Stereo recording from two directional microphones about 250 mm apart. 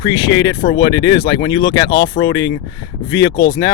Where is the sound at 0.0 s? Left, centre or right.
Centre.